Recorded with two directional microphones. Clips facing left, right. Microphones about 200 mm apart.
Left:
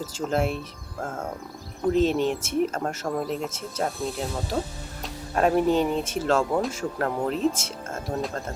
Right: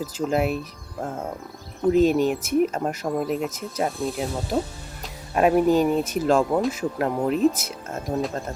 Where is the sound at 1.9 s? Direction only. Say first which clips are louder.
Right 3 dB; 10° right (ahead or behind).